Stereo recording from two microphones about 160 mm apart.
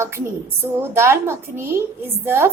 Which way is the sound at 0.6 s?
15° right (ahead or behind).